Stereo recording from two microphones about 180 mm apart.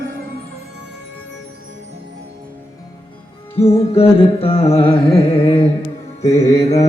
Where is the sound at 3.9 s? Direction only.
30° left (ahead or behind).